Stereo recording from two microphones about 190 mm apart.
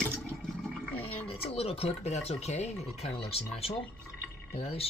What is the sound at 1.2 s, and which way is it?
Speech, 30° left (ahead or behind).